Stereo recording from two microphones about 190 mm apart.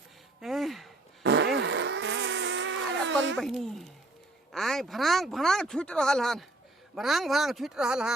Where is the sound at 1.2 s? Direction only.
70° right (ahead or behind).